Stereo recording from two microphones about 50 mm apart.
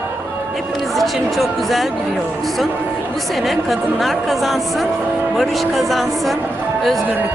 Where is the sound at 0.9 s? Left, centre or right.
Centre.